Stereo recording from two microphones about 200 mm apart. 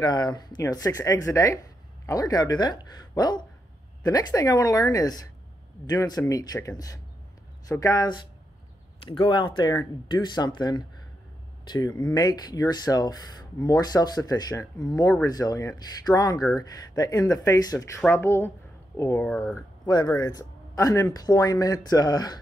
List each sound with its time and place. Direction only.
0.0 s speech: 20° left (ahead or behind)
12.1 s speech: 20° left (ahead or behind)